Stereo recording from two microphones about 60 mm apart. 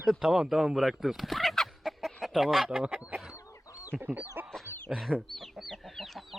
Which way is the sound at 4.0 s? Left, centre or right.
Right.